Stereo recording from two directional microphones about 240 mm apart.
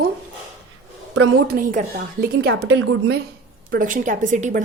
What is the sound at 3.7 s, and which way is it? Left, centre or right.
Speech, right.